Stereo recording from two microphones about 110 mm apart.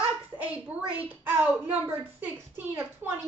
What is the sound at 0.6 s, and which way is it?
Speech, 15° right (ahead or behind).